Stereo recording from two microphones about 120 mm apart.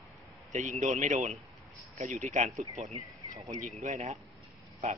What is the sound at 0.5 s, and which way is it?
A man's voice, 80° right.